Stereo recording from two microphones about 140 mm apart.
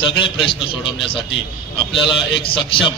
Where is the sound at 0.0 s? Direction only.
35° left (ahead or behind).